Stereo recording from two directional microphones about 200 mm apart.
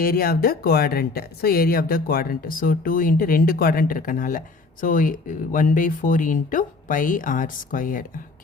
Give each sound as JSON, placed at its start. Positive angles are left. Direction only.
{"t": 0.0, "sound": "speech", "side_deg": 45}